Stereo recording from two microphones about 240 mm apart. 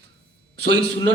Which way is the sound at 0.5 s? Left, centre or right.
Right.